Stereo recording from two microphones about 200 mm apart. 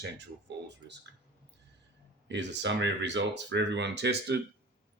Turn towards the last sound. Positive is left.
turn(degrees=-55)  # may be behind; listen again after turning